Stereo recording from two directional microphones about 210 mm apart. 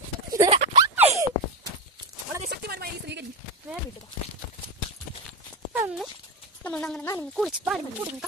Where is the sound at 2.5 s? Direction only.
50° right (ahead or behind).